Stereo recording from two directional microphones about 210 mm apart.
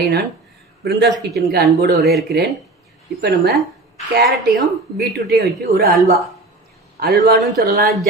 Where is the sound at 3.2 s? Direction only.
50° right (ahead or behind).